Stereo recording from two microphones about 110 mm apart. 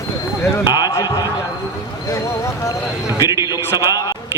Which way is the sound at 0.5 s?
30° left (ahead or behind).